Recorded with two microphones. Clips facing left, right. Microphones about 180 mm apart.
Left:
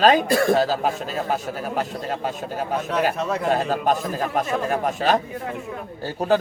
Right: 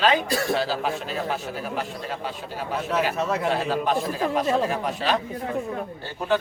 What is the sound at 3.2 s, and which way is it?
Speech, centre (ahead or behind).